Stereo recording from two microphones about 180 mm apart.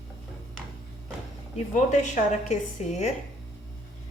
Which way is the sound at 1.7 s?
40° left (ahead or behind).